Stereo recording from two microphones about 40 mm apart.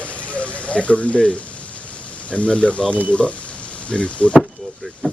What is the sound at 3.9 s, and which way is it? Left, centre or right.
Speech, left.